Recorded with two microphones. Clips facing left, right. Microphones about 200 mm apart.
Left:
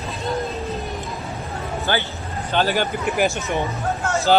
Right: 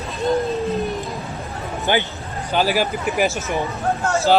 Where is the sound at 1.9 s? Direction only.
20° right (ahead or behind).